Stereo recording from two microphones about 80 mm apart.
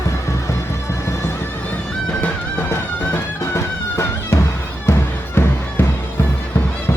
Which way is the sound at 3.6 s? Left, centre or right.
Left.